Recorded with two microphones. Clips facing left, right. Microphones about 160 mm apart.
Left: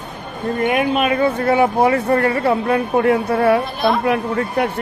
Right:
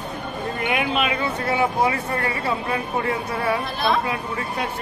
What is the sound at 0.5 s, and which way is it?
Speech, 45° left (ahead or behind).